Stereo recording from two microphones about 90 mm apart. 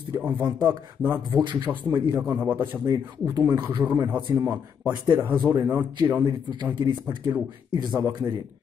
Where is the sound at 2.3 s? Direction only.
20° right (ahead or behind).